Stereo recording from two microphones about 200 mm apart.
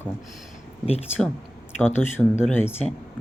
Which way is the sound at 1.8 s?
10° left (ahead or behind).